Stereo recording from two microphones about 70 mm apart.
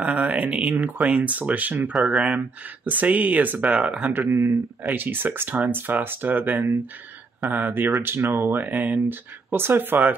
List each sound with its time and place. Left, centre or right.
0.0 s speech: centre
4.1 s speech: right